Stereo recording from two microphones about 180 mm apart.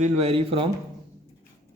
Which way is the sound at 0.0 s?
35° right (ahead or behind).